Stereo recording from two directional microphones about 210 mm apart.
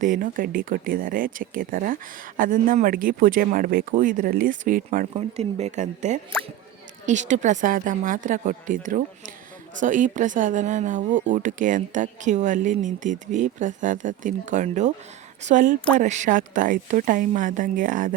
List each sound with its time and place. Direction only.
0.0 s speech: 40° right (ahead or behind)